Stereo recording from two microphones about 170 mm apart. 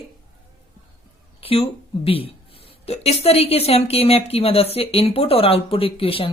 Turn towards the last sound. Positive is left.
turn(degrees=35)  # may be behind; listen again after turning